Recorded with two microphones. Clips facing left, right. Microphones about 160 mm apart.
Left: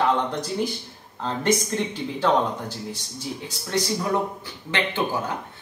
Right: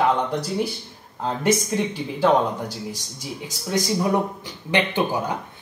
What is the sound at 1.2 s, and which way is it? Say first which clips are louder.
A man's voice: right 2 dB; 10° right (ahead or behind).